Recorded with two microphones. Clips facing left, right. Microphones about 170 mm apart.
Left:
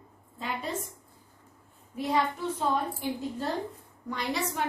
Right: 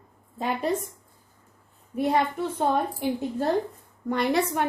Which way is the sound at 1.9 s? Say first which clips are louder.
Right 4 dB; 55° right (ahead or behind).